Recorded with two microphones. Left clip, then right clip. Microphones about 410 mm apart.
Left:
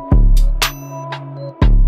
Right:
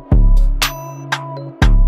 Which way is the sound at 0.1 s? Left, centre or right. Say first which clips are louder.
Left 1 dB; centre.